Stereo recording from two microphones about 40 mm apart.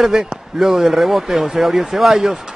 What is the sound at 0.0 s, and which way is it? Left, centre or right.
Speech, centre.